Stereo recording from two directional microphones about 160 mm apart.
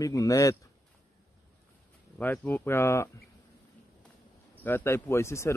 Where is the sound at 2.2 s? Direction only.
10° left (ahead or behind).